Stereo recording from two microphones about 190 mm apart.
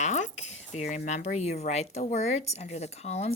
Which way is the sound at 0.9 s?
35° left (ahead or behind).